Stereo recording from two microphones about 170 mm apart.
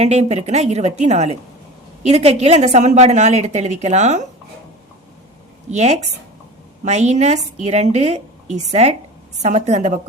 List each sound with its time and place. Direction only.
0.0 s a woman's voice: 40° right (ahead or behind)
5.7 s a woman's voice: 40° right (ahead or behind)